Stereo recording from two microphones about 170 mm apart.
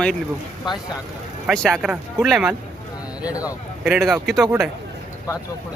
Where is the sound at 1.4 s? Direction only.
5° left (ahead or behind).